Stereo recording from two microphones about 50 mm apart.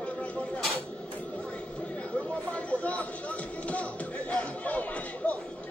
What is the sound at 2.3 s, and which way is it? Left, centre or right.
Music, left.